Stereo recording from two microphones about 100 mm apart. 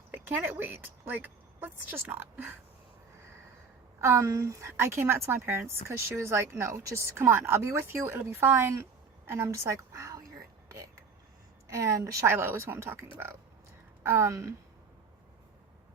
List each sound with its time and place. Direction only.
0.1 s a woman's voice: 20° right (ahead or behind)
4.0 s a woman's voice: 30° right (ahead or behind)
11.7 s a woman's voice: 30° right (ahead or behind)